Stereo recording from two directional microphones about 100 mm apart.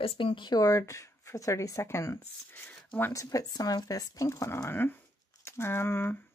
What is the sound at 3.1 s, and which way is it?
Speech, 35° left (ahead or behind).